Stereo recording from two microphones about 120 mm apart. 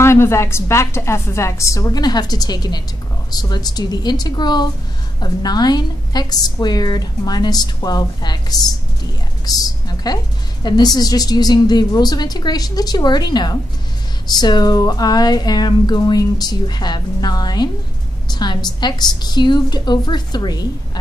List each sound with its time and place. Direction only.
0.0 s a woman's voice: 20° left (ahead or behind)